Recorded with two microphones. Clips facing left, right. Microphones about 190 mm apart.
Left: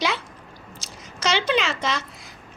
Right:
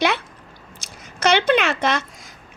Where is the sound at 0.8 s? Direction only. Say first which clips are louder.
Right 6 dB; 60° right (ahead or behind).